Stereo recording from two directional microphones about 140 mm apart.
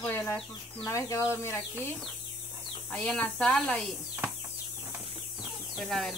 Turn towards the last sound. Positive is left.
turn(degrees=0)  # may be behind; listen again after turning